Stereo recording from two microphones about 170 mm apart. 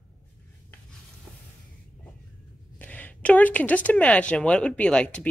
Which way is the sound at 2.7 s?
10° left (ahead or behind).